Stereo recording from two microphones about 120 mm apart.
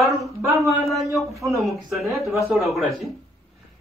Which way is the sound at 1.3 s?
25° right (ahead or behind).